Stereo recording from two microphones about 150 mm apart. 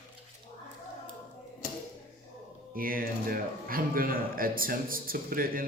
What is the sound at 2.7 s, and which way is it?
A man's voice, 70° right (ahead or behind).